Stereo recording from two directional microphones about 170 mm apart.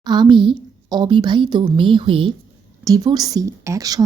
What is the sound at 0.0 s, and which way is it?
A woman's voice, 25° right (ahead or behind).